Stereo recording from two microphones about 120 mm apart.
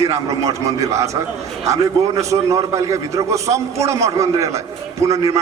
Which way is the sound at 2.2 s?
25° right (ahead or behind).